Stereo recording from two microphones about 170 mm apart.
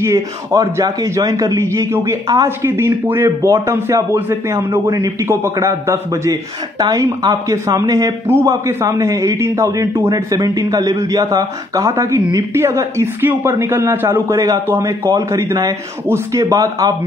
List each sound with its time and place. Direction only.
0.0 s a man's voice: 20° right (ahead or behind)